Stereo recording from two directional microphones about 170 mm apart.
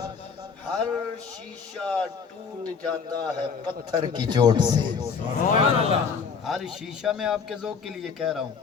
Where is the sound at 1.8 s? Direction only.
5° left (ahead or behind).